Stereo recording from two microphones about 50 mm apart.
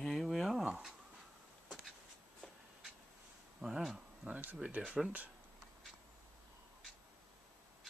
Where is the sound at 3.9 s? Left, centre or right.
Right.